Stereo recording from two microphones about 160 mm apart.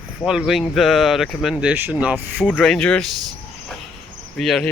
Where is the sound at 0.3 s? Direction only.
5° right (ahead or behind).